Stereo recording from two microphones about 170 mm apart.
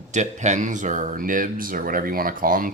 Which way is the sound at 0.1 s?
45° right (ahead or behind).